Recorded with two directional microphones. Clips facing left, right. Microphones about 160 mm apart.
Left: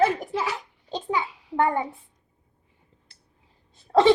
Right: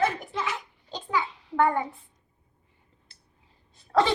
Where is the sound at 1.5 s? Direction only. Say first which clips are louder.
Even; 20° left (ahead or behind).